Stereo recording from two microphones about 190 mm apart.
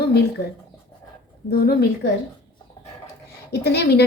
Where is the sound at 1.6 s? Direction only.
55° left (ahead or behind).